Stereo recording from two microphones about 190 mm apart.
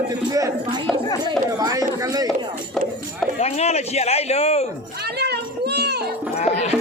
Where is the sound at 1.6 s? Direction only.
20° right (ahead or behind).